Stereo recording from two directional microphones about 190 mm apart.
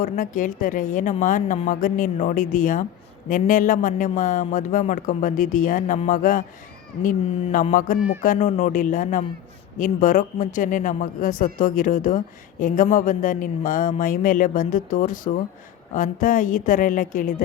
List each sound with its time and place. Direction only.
0.0 s speech: 45° left (ahead or behind)